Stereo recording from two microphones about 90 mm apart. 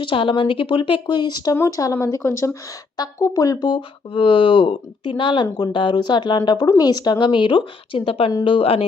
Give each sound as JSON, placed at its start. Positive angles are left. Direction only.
{"t": 0.0, "sound": "speech", "side_deg": 70}
{"t": 1.5, "sound": "speech", "side_deg": 40}
{"t": 3.0, "sound": "a woman's voice", "side_deg": 40}